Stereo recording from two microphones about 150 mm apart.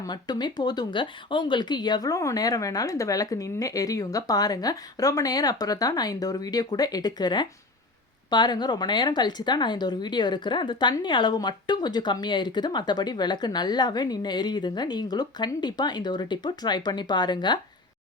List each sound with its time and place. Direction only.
0.0 s a woman's voice: 30° left (ahead or behind)